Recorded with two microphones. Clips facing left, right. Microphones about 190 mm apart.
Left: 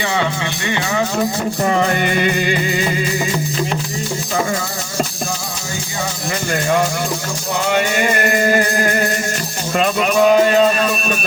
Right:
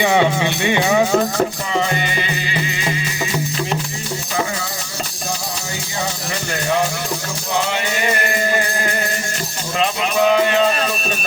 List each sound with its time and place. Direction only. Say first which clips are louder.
0.0 s speech: right 4 dB; 20° right (ahead or behind)
1.6 s music: left 4 dB; 55° left (ahead or behind)
9.7 s music: left 4 dB; 50° left (ahead or behind)